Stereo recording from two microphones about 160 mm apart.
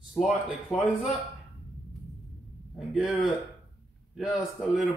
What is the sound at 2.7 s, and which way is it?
Speech, centre (ahead or behind).